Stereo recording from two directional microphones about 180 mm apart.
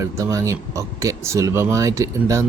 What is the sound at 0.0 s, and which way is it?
Speech, 15° right (ahead or behind).